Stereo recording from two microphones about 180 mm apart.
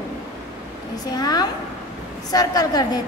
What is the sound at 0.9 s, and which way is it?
A woman's voice, 20° left (ahead or behind).